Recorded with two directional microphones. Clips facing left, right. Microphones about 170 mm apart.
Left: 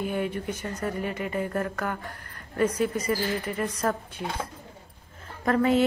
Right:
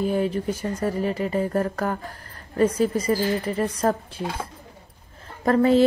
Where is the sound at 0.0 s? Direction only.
30° right (ahead or behind).